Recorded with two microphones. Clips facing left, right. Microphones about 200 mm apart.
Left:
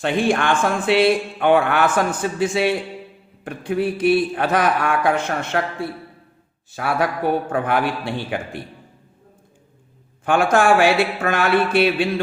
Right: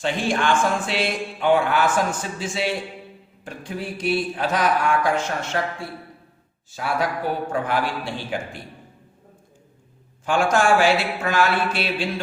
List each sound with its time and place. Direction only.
0.0 s speech: 55° left (ahead or behind)
6.7 s speech: 60° left (ahead or behind)
10.2 s speech: 60° left (ahead or behind)